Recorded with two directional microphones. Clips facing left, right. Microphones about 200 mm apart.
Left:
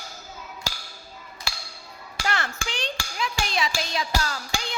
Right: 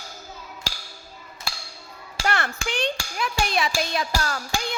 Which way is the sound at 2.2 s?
55° right (ahead or behind).